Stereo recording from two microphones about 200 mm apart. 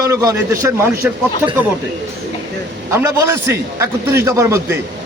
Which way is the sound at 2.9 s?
15° right (ahead or behind).